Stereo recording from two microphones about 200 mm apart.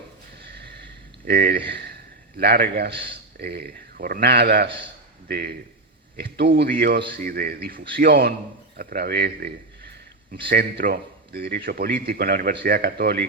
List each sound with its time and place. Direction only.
1.2 s a man's voice: 50° right (ahead or behind)
10.5 s a man's voice: 50° right (ahead or behind)